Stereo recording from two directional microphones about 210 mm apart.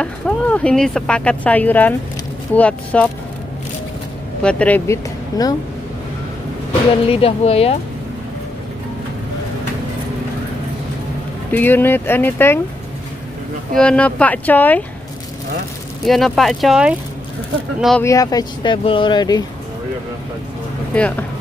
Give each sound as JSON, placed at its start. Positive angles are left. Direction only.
{"t": 0.0, "sound": "speech", "side_deg": 5}
{"t": 4.4, "sound": "speech", "side_deg": 5}
{"t": 7.1, "sound": "speech", "side_deg": 25}
{"t": 11.5, "sound": "speech", "side_deg": 10}
{"t": 13.7, "sound": "speech", "side_deg": 5}
{"t": 16.1, "sound": "speech", "side_deg": 0}
{"t": 18.0, "sound": "speech", "side_deg": 15}
{"t": 20.9, "sound": "speech", "side_deg": 5}